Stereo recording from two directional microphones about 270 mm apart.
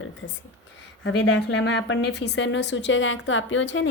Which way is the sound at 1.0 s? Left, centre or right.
Left.